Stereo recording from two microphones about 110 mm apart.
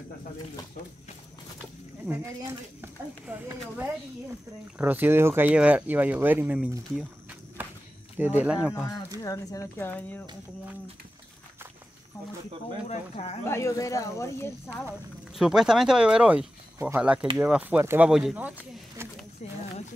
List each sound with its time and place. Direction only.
2.8 s speech: 20° right (ahead or behind)
8.2 s speech: 15° right (ahead or behind)
9.2 s speech: 30° left (ahead or behind)
12.8 s speech: 75° left (ahead or behind)
13.5 s speech: 25° left (ahead or behind)
15.3 s speech: 5° right (ahead or behind)
16.7 s speech: 20° right (ahead or behind)
19.0 s speech: 20° right (ahead or behind)